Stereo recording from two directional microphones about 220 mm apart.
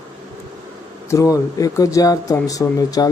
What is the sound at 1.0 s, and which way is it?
Speech, 15° left (ahead or behind).